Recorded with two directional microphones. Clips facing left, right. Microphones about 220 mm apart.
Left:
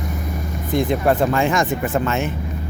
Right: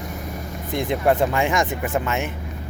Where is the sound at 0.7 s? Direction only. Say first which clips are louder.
Left 2 dB; 25° right (ahead or behind).